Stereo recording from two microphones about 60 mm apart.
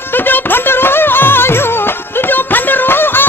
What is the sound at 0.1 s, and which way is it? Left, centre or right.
Music, left.